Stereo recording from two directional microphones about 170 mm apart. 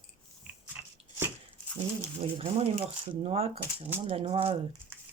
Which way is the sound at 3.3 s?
35° right (ahead or behind).